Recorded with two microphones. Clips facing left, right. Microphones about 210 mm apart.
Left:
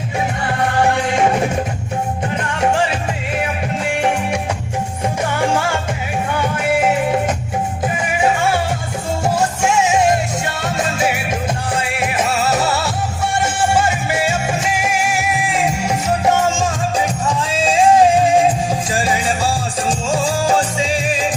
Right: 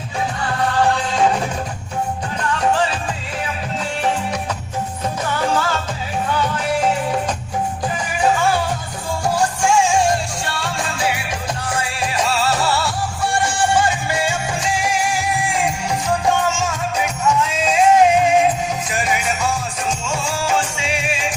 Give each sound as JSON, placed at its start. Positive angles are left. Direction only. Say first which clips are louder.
{"t": 0.6, "sound": "music", "louder": "left 2 dB", "side_deg": 25}
{"t": 5.4, "sound": "music", "louder": "left 1 dB", "side_deg": 25}
{"t": 9.3, "sound": "music", "louder": "right 1 dB", "side_deg": 20}
{"t": 16.4, "sound": "music", "louder": "left 3 dB", "side_deg": 35}